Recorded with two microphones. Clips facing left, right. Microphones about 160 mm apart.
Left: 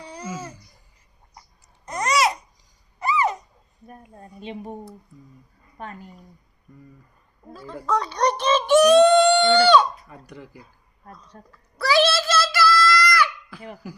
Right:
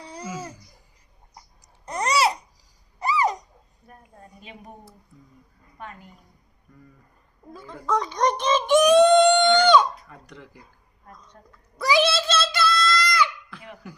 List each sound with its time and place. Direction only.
0.2 s babbling: 10° right (ahead or behind)
1.8 s babbling: 30° right (ahead or behind)
3.0 s a sound: 35° right (ahead or behind)
4.4 s speech: 25° left (ahead or behind)
7.9 s speech: 15° right (ahead or behind)
10.1 s speech: 10° left (ahead or behind)
11.3 s a child's voice: 40° left (ahead or behind)
11.8 s a sound: 15° right (ahead or behind)